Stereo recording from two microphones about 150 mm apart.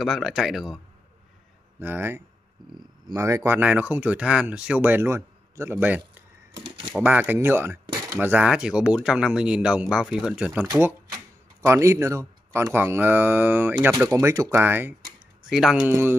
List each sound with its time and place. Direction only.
0.0 s speech: centre (ahead or behind)
1.8 s speech: 15° right (ahead or behind)
2.6 s speech: 25° right (ahead or behind); by 6.0 s 10° right (ahead or behind)
6.5 s typewriter: 30° right (ahead or behind)
6.9 s speech: 10° right (ahead or behind)
15.9 s speech: 15° right (ahead or behind)